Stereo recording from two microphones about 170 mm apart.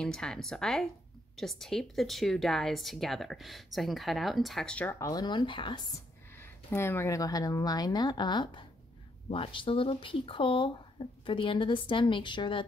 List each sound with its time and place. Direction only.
0.0 s speech: 5° left (ahead or behind)
4.9 s speech: 20° left (ahead or behind)
6.4 s speech: 15° left (ahead or behind); by 12.6 s 30° left (ahead or behind)